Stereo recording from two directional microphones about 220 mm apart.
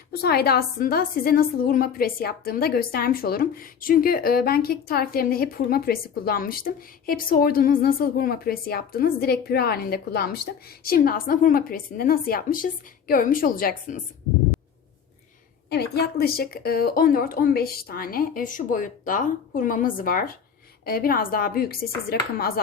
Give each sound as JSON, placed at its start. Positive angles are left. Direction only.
{"t": 0.1, "sound": "a woman's voice", "side_deg": 45}
{"t": 15.7, "sound": "a woman's voice", "side_deg": 45}